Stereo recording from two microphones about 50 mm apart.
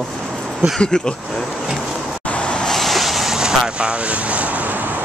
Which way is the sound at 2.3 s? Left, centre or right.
Left.